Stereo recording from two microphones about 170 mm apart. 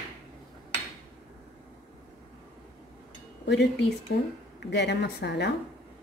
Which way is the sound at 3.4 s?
90° left.